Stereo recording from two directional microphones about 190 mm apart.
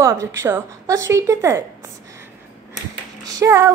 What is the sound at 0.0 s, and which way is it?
A woman's voice, 15° right (ahead or behind).